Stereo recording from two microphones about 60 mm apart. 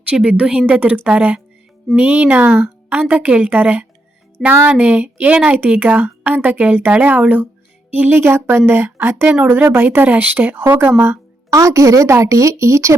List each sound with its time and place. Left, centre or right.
0.3 s a woman's voice: centre
4.4 s speech: centre
4.8 s a woman's voice: right
8.2 s speech: right
9.3 s a woman's voice: right
11.5 s speech: right